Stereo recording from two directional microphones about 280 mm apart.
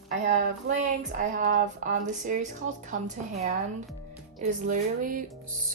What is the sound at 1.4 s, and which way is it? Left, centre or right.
A woman's voice, right.